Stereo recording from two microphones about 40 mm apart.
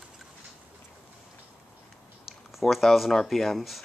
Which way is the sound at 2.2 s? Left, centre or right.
Centre.